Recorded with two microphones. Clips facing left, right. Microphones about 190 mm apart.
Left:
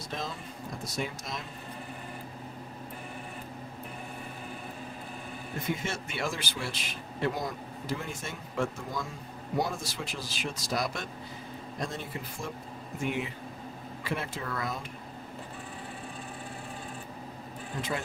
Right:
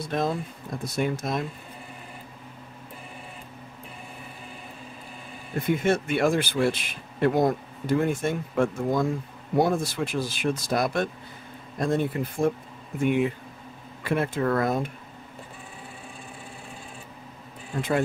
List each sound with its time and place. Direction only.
0.0 s speech: 55° right (ahead or behind)
5.7 s speech: 55° right (ahead or behind)